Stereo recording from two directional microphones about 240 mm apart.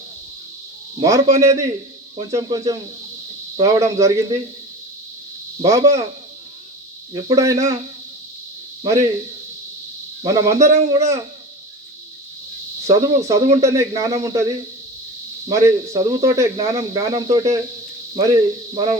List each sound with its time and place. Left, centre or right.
0.9 s speech: centre
5.6 s speech: centre
7.1 s speech: centre
8.8 s speech: centre
10.2 s speech: centre
12.9 s speech: centre